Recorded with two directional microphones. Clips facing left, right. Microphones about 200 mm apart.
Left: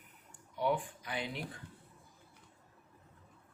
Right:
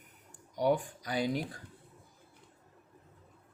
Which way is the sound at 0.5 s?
40° right (ahead or behind).